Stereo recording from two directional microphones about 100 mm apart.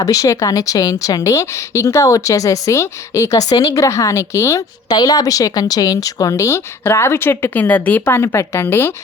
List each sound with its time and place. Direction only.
0.0 s a woman's voice: 35° left (ahead or behind)
4.9 s a woman's voice: 40° left (ahead or behind); by 8.9 s 20° left (ahead or behind)